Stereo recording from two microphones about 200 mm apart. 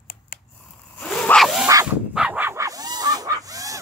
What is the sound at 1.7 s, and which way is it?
Dog, 15° right (ahead or behind).